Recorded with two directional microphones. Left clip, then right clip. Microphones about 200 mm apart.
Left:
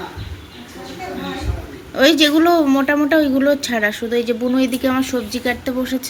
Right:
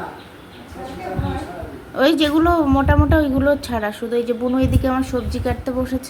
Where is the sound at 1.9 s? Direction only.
10° left (ahead or behind).